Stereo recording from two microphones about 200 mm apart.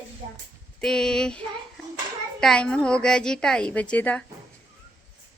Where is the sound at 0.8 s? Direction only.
5° left (ahead or behind).